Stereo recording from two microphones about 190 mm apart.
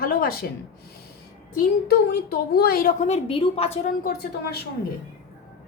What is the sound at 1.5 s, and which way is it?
A woman's voice, 55° left (ahead or behind).